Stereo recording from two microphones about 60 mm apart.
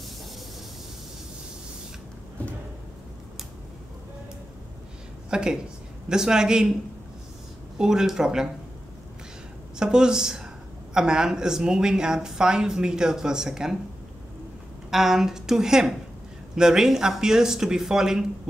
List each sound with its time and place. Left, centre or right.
5.3 s speech: centre
7.7 s speech: centre
9.8 s speech: centre
14.9 s speech: centre